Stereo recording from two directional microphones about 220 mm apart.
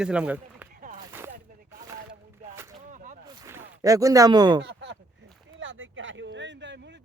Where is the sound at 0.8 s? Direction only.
35° right (ahead or behind).